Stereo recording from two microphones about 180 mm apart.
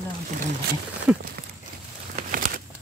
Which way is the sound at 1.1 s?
5° right (ahead or behind).